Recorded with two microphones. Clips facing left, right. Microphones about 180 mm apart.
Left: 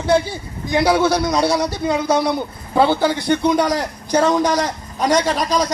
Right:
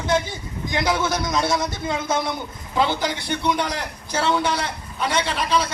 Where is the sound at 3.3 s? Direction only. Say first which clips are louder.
Left 7 dB; 45° left (ahead or behind).